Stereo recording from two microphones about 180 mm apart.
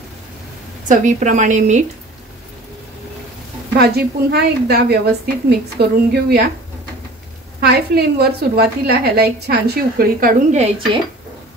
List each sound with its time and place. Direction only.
0.8 s speech: 45° right (ahead or behind)
3.7 s a woman's voice: 60° right (ahead or behind)
7.6 s a woman's voice: 65° right (ahead or behind)